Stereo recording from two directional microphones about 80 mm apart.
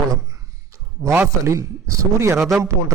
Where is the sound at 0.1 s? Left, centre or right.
Right.